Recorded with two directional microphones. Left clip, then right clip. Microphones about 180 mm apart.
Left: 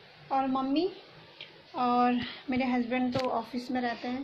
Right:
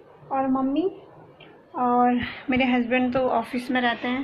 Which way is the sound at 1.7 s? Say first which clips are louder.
Right 6 dB; 25° left (ahead or behind).